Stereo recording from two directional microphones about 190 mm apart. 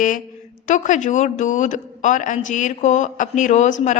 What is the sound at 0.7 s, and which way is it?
A woman's voice, 40° left (ahead or behind).